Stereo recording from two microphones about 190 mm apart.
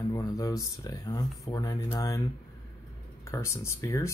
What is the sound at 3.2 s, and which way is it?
Speech, 15° left (ahead or behind).